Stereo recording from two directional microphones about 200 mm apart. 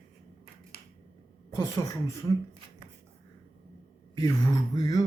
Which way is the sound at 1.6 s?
15° left (ahead or behind).